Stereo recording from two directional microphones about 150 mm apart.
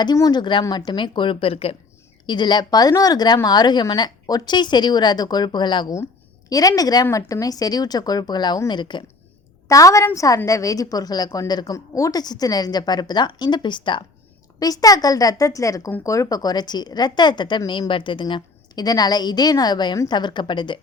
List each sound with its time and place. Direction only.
0.0 s speech: 25° left (ahead or behind)
0.9 s speech: 30° left (ahead or behind)
9.6 s speech: 20° left (ahead or behind)